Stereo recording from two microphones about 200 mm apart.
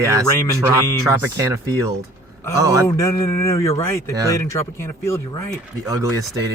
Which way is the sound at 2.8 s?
15° left (ahead or behind).